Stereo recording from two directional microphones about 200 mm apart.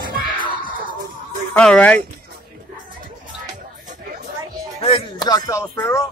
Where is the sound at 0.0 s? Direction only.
45° right (ahead or behind).